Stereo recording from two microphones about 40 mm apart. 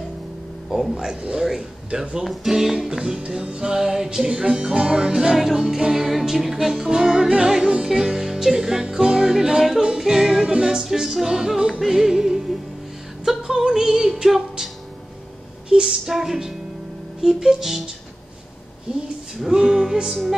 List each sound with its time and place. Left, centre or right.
0.7 s music: centre
2.2 s music: centre
2.9 s music: right
4.3 s music: right; by 14.7 s centre
15.7 s a woman's voice: centre
17.2 s music: centre
19.5 s music: centre